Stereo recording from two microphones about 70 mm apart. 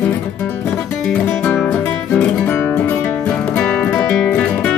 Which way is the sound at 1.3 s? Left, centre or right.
Centre.